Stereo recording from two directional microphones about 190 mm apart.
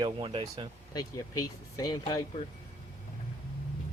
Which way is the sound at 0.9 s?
20° left (ahead or behind).